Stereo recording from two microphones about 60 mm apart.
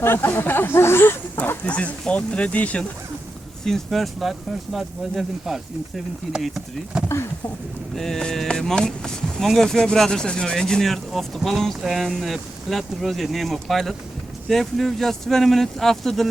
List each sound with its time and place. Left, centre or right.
0.0 s speech: left
1.6 s speech: left
3.6 s speech: centre
6.9 s speech: centre
7.9 s speech: centre